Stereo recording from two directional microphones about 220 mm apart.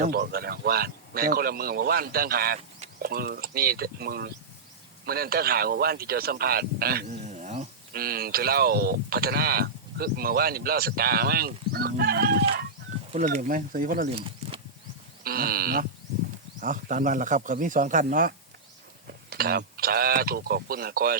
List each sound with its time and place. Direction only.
0.0 s speech: 45° right (ahead or behind)
13.1 s a man's voice: 35° right (ahead or behind)
14.2 s a sound: 25° right (ahead or behind)
15.2 s a man's voice: 45° right (ahead or behind)